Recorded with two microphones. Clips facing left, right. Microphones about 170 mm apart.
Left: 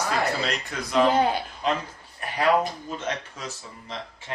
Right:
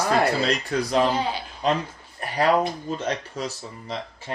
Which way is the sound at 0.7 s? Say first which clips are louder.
Right 9 dB; 35° right (ahead or behind).